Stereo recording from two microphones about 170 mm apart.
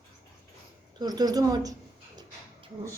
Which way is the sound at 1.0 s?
20° right (ahead or behind).